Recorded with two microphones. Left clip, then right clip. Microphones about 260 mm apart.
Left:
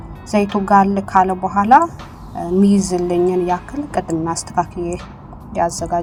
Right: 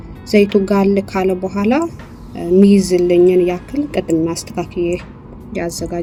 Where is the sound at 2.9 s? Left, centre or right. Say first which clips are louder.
Right 6 dB; left.